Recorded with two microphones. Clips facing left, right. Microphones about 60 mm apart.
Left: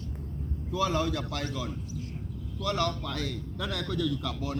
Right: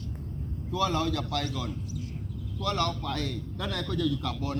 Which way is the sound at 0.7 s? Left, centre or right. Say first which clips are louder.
Even; centre.